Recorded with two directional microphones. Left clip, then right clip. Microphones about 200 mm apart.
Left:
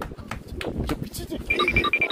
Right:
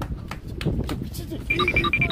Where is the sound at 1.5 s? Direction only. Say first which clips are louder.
Even; centre (ahead or behind).